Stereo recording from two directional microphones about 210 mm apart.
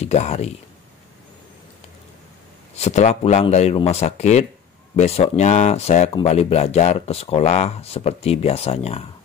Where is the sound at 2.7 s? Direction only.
30° left (ahead or behind).